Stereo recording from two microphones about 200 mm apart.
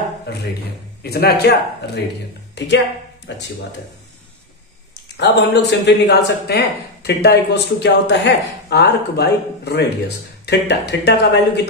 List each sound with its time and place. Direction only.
0.3 s speech: 55° left (ahead or behind)
5.1 s speech: 60° left (ahead or behind)